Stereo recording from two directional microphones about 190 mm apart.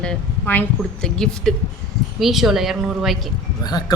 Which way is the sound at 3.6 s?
20° left (ahead or behind).